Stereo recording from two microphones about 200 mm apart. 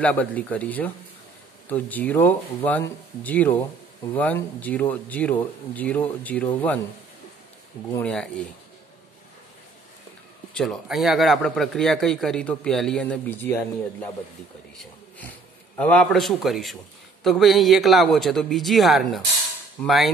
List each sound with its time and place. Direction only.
0.0 s speech: 5° left (ahead or behind)
7.9 s a man's voice: 5° left (ahead or behind)
10.5 s a man's voice: centre (ahead or behind)
15.1 s a man's voice: 10° left (ahead or behind)